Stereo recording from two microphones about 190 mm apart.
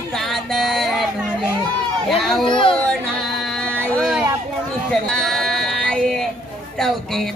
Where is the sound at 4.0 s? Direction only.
Centre (ahead or behind).